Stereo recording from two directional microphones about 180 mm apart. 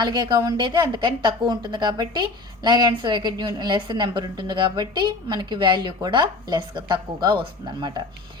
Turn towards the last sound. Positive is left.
turn(degrees=-25)  # may be behind; listen again after turning